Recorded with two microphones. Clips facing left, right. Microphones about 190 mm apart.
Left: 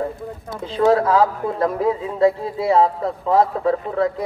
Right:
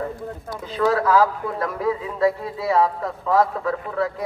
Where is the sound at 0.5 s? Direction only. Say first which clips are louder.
Left 5 dB; 30° left (ahead or behind).